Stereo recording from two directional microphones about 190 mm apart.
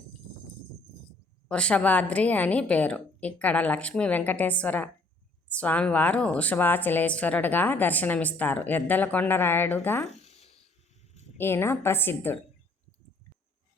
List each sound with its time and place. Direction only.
1.5 s a woman's voice: 5° left (ahead or behind)
10.2 s a sound: 35° left (ahead or behind)
11.3 s a woman's voice: 10° left (ahead or behind)